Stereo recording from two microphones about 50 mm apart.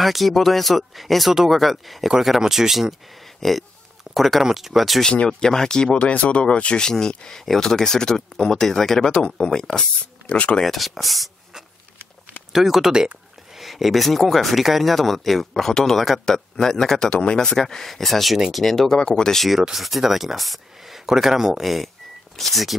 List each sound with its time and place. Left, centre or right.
0.0 s speech: centre
5.1 s speech: left
10.2 s speech: left
10.6 s speech: centre
12.5 s speech: centre
19.6 s speech: centre